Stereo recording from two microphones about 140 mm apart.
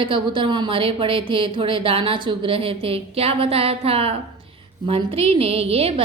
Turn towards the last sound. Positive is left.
turn(degrees=-45)  # may be behind; listen again after turning